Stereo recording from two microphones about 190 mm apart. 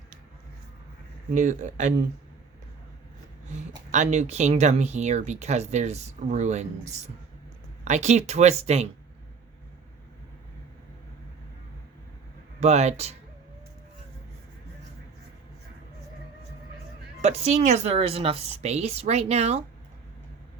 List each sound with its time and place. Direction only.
1.3 s speech: 40° right (ahead or behind)
3.9 s speech: 40° right (ahead or behind)
12.5 s speech: 35° right (ahead or behind)
17.2 s speech: 35° right (ahead or behind)